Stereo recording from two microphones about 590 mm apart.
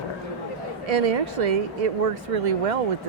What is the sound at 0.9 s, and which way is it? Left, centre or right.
Speech, right.